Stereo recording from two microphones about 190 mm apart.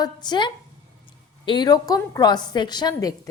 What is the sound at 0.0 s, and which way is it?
A woman's voice, 20° left (ahead or behind).